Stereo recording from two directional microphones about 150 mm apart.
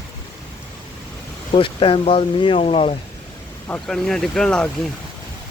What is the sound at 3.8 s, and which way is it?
Speech, 5° left (ahead or behind).